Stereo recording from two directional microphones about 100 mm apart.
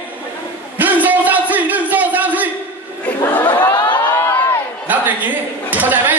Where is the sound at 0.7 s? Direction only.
15° right (ahead or behind).